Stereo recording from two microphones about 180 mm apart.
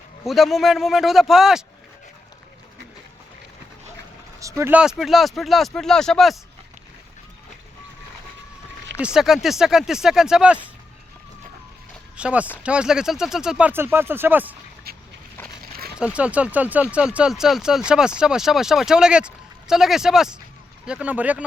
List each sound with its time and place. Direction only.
0.3 s speech: centre (ahead or behind)
4.4 s speech: 15° right (ahead or behind); by 6.3 s centre (ahead or behind)
9.0 s speech: 5° right (ahead or behind)
12.1 s speech: 5° right (ahead or behind)
14.9 s a sound: 60° right (ahead or behind)
16.0 s speech: 5° right (ahead or behind)